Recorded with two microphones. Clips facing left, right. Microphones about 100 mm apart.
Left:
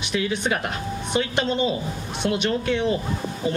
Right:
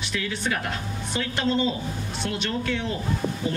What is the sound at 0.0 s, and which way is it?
Speech, 20° left (ahead or behind).